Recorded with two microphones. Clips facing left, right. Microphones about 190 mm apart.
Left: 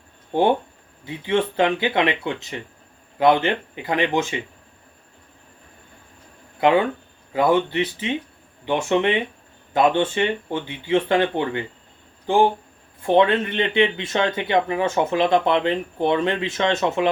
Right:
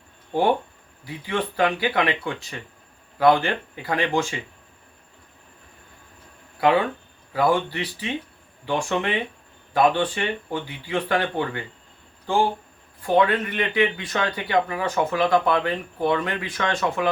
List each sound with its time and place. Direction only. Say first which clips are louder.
1.0 s speech: left 5 dB; 25° left (ahead or behind)
6.6 s speech: left 2 dB; 25° left (ahead or behind)